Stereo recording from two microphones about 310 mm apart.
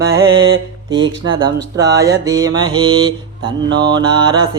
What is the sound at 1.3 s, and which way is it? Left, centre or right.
Music, centre.